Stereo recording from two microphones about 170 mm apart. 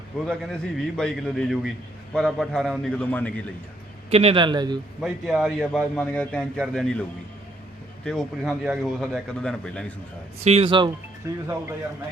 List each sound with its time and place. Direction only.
0.3 s a man's voice: 5° left (ahead or behind)
4.1 s a man's voice: 35° right (ahead or behind)
4.9 s a man's voice: centre (ahead or behind)
8.0 s a man's voice: 5° left (ahead or behind)
10.4 s a man's voice: 35° right (ahead or behind); by 11.4 s 20° right (ahead or behind)